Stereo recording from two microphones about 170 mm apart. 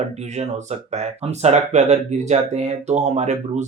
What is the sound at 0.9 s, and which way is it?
Speech, 40° right (ahead or behind).